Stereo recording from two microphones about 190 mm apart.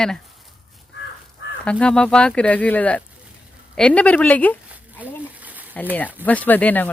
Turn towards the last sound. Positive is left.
turn(degrees=10)  # may be behind; listen again after turning